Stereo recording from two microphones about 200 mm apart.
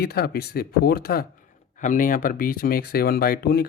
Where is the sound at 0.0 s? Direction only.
50° left (ahead or behind).